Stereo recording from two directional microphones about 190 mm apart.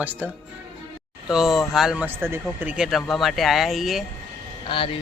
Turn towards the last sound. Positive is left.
turn(degrees=25)  # may be behind; listen again after turning